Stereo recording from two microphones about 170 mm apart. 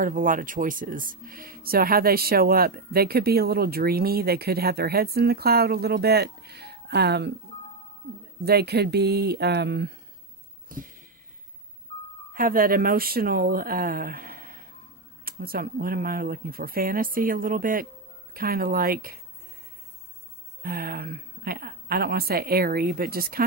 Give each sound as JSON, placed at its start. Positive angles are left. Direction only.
{"t": 0.0, "sound": "speech", "side_deg": -55}
{"t": 8.5, "sound": "speech", "side_deg": -70}
{"t": 10.7, "sound": "a sound", "side_deg": -55}
{"t": 12.3, "sound": "speech", "side_deg": -55}
{"t": 20.6, "sound": "speech", "side_deg": -60}